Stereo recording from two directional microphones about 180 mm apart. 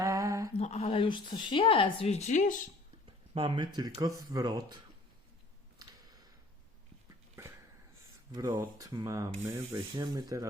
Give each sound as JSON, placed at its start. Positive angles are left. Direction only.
{"t": 0.0, "sound": "mantra", "side_deg": -20}
{"t": 0.5, "sound": "speech", "side_deg": 35}
{"t": 3.3, "sound": "speech", "side_deg": -25}
{"t": 7.4, "sound": "a sound", "side_deg": -15}
{"t": 8.3, "sound": "speech", "side_deg": -25}